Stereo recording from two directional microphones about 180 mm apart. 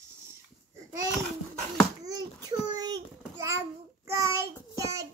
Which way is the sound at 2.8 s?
20° right (ahead or behind).